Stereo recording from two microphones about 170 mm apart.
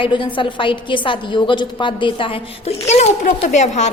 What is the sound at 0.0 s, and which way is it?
A woman's voice, 30° left (ahead or behind).